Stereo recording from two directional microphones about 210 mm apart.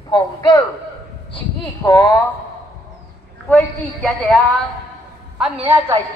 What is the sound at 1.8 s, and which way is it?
Speech, 15° left (ahead or behind).